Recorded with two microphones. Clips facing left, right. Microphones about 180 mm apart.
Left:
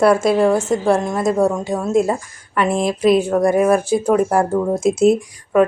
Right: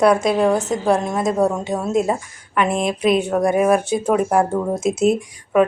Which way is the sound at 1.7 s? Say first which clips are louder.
Left 1 dB; 20° right (ahead or behind).